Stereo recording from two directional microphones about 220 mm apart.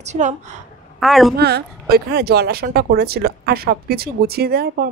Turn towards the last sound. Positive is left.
turn(degrees=-45)  # may be behind; listen again after turning